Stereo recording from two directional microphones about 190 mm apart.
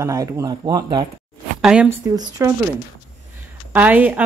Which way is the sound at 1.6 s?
5° right (ahead or behind).